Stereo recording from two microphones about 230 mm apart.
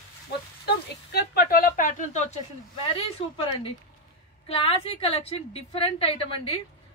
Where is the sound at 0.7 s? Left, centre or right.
Left.